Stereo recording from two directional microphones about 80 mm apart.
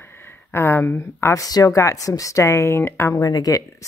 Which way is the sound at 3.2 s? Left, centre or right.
Left.